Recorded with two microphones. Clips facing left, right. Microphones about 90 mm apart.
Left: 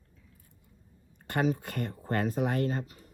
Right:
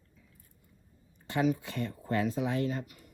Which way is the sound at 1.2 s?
55° left (ahead or behind).